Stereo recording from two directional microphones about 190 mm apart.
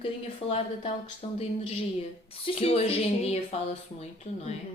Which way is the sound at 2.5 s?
30° left (ahead or behind).